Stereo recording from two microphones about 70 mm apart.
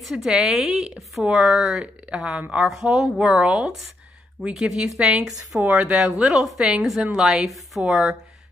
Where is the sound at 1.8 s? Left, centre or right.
Centre.